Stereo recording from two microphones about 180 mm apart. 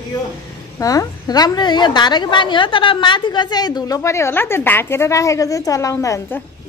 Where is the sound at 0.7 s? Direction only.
20° left (ahead or behind).